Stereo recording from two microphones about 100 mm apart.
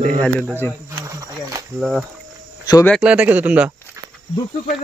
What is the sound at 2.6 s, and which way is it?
Speech, 40° left (ahead or behind).